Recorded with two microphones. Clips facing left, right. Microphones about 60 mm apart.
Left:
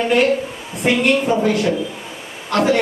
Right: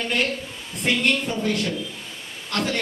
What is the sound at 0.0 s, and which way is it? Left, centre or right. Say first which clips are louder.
A man's voice: left 9 dB; centre.